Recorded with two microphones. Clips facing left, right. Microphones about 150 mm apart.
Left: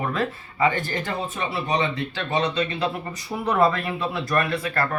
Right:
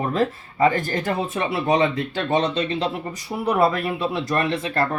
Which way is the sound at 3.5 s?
15° right (ahead or behind).